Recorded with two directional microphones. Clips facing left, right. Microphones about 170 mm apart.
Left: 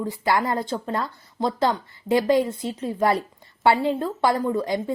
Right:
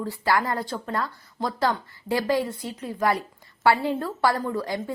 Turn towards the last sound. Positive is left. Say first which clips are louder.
# left 4 dB
turn(degrees=20)  # may be behind; listen again after turning